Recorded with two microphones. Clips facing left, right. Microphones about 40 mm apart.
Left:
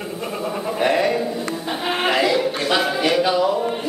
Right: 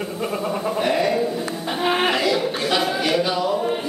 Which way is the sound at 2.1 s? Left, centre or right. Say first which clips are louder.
Left 2 dB; centre.